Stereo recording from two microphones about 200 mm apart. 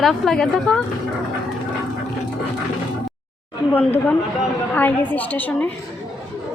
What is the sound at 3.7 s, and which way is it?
Speech, 10° left (ahead or behind).